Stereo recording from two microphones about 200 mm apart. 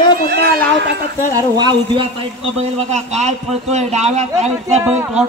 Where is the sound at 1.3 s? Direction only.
20° right (ahead or behind).